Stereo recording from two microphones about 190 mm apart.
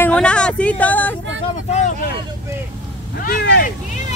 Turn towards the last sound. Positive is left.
turn(degrees=55)  # may be behind; listen again after turning